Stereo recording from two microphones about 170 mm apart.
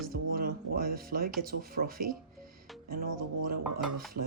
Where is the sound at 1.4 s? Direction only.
60° right (ahead or behind).